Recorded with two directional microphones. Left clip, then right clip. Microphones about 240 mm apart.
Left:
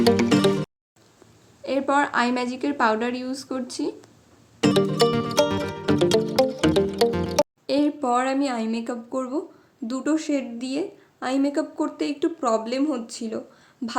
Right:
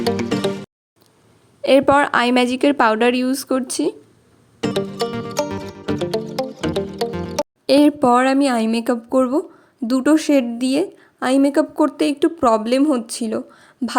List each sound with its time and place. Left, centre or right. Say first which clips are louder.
0.0 s music: left 2 dB; centre
1.6 s a woman's voice: right 9 dB; right
4.6 s music: left 3 dB; centre
7.7 s a woman's voice: right 13 dB; right